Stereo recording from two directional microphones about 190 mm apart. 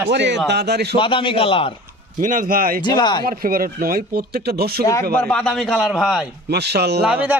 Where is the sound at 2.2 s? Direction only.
45° right (ahead or behind).